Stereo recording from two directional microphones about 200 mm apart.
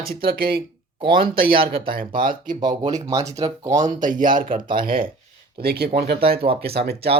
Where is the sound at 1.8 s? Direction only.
45° right (ahead or behind).